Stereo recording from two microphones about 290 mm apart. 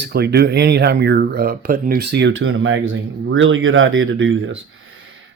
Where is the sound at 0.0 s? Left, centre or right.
Right.